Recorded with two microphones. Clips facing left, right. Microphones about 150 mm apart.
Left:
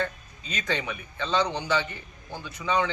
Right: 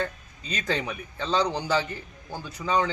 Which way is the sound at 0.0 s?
35° right (ahead or behind).